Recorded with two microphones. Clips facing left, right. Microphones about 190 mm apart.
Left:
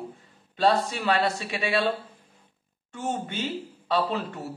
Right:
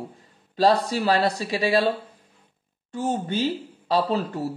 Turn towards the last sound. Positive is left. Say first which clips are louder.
# right 4 dB
turn(degrees=-35)  # may be behind; listen again after turning